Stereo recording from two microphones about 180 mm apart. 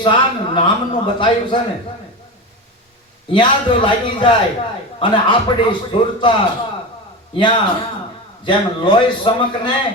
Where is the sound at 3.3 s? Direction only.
25° left (ahead or behind).